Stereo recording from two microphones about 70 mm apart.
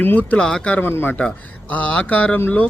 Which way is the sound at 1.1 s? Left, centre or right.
Centre.